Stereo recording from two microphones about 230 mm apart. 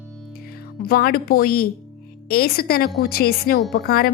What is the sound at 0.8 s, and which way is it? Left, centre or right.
A woman's voice, left.